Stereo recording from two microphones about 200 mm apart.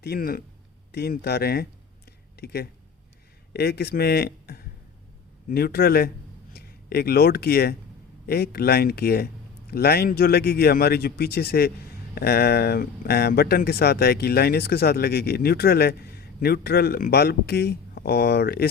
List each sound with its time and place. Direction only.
0.0 s speech: 50° left (ahead or behind)